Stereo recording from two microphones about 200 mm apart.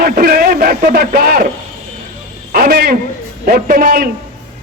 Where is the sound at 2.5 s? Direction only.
45° right (ahead or behind).